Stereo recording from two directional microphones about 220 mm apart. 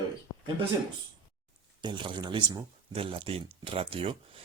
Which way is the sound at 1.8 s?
20° right (ahead or behind).